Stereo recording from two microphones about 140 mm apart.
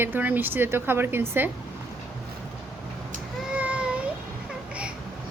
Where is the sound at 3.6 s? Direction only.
10° right (ahead or behind).